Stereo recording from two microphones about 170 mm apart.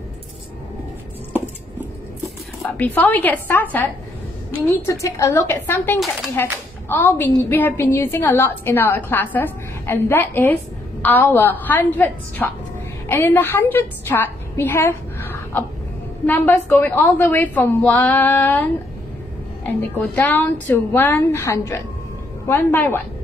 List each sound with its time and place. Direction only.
2.8 s a woman's voice: 10° left (ahead or behind)
5.0 s a woman's voice: 20° left (ahead or behind)